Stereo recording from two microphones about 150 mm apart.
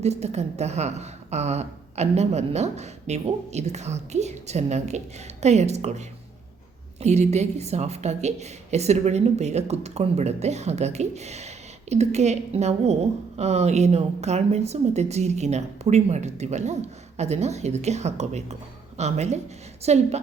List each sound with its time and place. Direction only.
0.0 s a woman's voice: 45° right (ahead or behind)